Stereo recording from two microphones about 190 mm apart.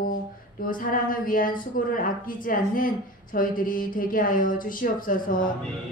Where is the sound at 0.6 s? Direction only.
45° left (ahead or behind).